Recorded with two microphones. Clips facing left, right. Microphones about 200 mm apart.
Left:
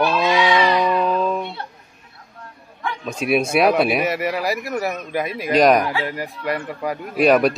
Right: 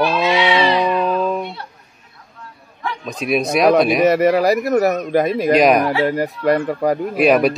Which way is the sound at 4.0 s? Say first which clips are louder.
Right 9 dB; 40° right (ahead or behind).